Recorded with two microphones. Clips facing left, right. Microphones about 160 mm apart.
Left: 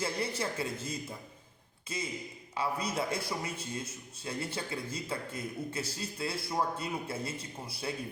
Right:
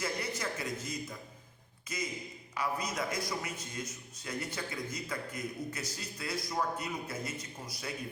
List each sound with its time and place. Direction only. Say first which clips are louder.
0.0 s a man's voice: left 3 dB; 30° left (ahead or behind)